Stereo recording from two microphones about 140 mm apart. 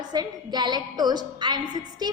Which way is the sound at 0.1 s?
30° right (ahead or behind).